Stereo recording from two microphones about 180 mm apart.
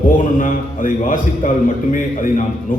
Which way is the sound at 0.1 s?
50° left (ahead or behind).